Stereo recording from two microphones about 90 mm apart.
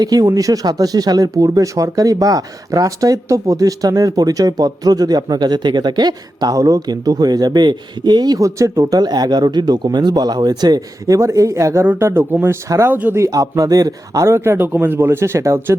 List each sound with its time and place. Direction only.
0.0 s a man's voice: 45° right (ahead or behind); by 12.5 s 25° right (ahead or behind)
12.6 s speech: 35° right (ahead or behind)
12.9 s a man's voice: 20° right (ahead or behind)
13.1 s a man's voice: 40° right (ahead or behind)